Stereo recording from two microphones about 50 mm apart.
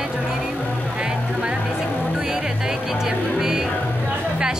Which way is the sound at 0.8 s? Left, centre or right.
Right.